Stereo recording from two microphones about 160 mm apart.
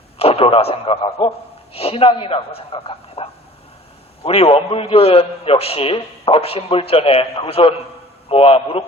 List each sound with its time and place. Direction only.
0.2 s a man's voice: 40° left (ahead or behind)